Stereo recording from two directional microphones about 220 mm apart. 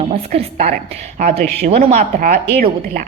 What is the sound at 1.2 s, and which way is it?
A woman's voice, 40° right (ahead or behind).